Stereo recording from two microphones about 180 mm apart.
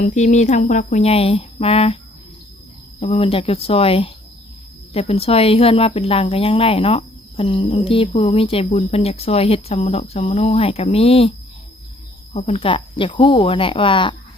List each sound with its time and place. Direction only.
0.0 s speech: 40° left (ahead or behind)
3.0 s speech: 30° left (ahead or behind)
12.3 s speech: 35° left (ahead or behind)